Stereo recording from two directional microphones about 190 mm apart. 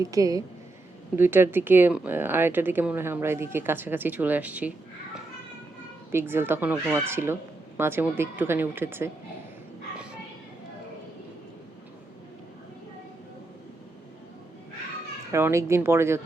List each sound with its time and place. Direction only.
0.0 s speech: 20° right (ahead or behind)
6.1 s speech: 10° right (ahead or behind)
15.3 s speech: 15° right (ahead or behind)